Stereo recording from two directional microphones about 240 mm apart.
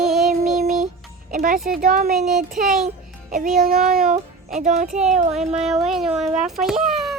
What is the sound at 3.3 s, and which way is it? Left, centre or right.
Child singing, right.